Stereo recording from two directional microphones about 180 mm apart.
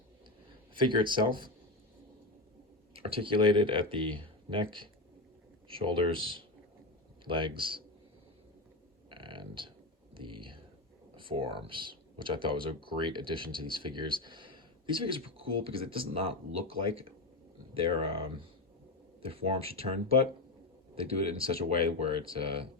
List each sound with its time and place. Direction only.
0.8 s speech: 25° right (ahead or behind)
2.9 s speech: 30° right (ahead or behind)
9.0 s a sound: 25° right (ahead or behind)
10.2 s whispering: 25° right (ahead or behind)
11.2 s speech: 30° right (ahead or behind)